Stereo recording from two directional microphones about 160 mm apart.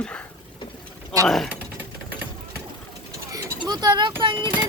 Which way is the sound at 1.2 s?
Centre (ahead or behind).